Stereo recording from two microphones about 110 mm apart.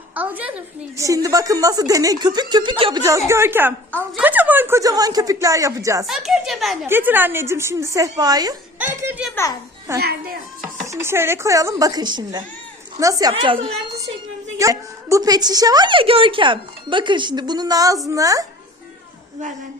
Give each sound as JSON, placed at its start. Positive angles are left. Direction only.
{"t": 0.1, "sound": "speech", "side_deg": -15}
{"t": 0.9, "sound": "a woman's voice", "side_deg": -30}
{"t": 3.0, "sound": "a woman's voice", "side_deg": -30}
{"t": 4.8, "sound": "a woman's voice", "side_deg": -35}
{"t": 6.1, "sound": "a child's voice", "side_deg": -5}
{"t": 6.8, "sound": "a woman's voice", "side_deg": -20}
{"t": 8.8, "sound": "a woman's voice", "side_deg": -20}
{"t": 13.0, "sound": "a woman's voice", "side_deg": -30}
{"t": 13.3, "sound": "a woman's voice", "side_deg": -55}
{"t": 14.6, "sound": "a woman's voice", "side_deg": -30}